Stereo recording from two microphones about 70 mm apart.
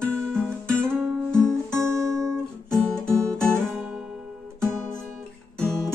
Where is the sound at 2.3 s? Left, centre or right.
Centre.